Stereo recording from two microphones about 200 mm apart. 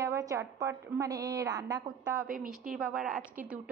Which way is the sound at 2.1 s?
45° right (ahead or behind).